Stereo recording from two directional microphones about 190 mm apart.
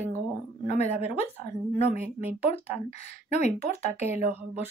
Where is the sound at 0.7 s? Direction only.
35° left (ahead or behind).